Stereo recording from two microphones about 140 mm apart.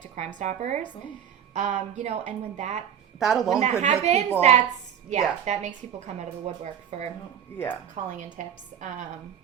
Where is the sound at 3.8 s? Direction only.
55° right (ahead or behind).